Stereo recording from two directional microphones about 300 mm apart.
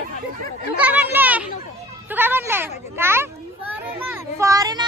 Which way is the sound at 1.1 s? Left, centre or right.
Centre.